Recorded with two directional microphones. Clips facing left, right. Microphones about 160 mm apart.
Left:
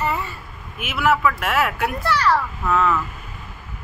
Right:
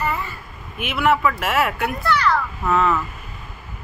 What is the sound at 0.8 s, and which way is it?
Speech, centre (ahead or behind).